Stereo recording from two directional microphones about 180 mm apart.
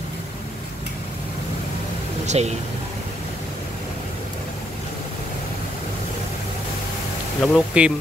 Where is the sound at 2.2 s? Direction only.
40° right (ahead or behind).